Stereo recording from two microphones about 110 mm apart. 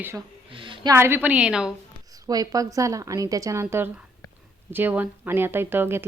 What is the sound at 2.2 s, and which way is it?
A woman's voice, 35° right (ahead or behind).